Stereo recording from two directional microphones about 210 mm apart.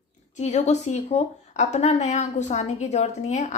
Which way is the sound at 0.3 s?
35° left (ahead or behind).